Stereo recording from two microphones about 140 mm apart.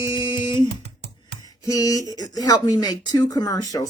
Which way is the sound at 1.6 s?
25° left (ahead or behind).